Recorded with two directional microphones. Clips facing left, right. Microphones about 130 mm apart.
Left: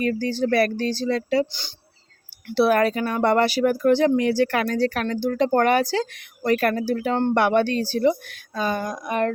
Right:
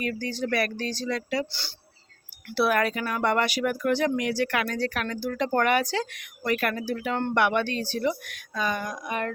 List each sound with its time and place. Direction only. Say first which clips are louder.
0.0 s speech: left 7 dB; 35° left (ahead or behind)
2.5 s speech: left 5 dB; 30° left (ahead or behind)